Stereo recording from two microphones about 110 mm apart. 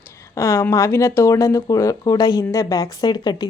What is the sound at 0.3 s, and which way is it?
A woman's voice, 25° left (ahead or behind).